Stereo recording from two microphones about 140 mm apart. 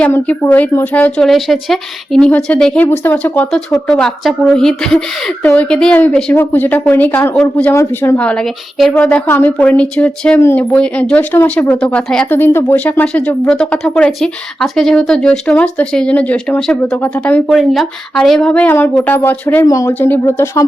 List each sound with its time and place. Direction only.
0.0 s speech: 10° left (ahead or behind)
19.6 s speech: 25° left (ahead or behind)
19.9 s speech: 10° left (ahead or behind)